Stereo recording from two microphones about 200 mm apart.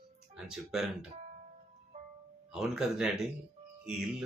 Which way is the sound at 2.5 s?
5° right (ahead or behind).